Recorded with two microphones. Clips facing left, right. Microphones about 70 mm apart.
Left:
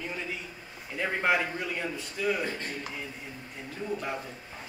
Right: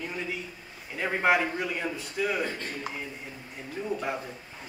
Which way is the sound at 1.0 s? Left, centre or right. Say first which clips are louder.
Right 2 dB; centre.